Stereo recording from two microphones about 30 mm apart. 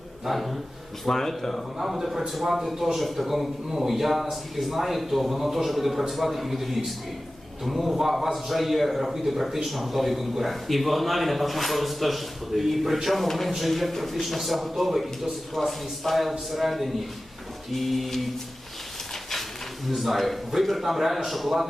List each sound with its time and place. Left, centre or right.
0.3 s a man's voice: centre
1.0 s speech: centre
1.8 s a man's voice: centre
20.0 s a man's voice: centre